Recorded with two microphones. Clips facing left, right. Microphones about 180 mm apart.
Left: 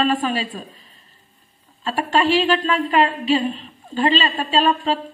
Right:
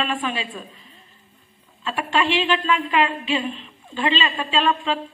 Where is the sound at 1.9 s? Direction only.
40° left (ahead or behind).